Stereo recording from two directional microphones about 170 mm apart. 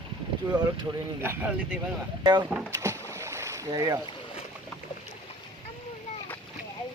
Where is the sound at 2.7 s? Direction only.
20° right (ahead or behind).